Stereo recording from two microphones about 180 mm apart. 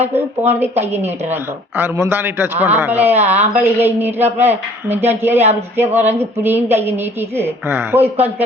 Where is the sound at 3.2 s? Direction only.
35° right (ahead or behind).